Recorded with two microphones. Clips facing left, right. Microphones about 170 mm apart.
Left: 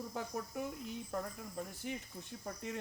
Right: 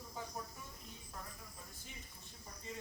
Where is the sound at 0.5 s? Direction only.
75° left (ahead or behind).